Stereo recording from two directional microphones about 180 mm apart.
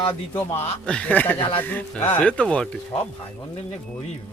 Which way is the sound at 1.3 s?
30° left (ahead or behind).